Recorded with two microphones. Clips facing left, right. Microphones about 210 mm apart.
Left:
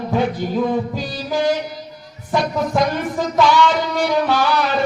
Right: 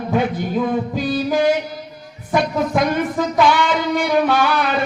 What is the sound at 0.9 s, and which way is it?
Music, 55° right (ahead or behind).